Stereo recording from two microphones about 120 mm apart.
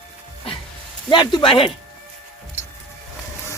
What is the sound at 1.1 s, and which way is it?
Speech, 40° left (ahead or behind).